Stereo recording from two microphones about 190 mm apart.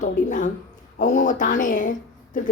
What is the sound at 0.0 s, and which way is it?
A man's voice, 40° left (ahead or behind).